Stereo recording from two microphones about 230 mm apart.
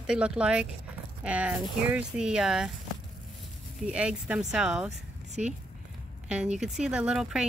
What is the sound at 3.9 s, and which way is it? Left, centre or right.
Speech, centre.